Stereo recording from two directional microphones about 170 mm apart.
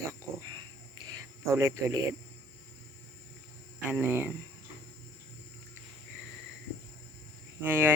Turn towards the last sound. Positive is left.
turn(degrees=-10)  # may be behind; listen again after turning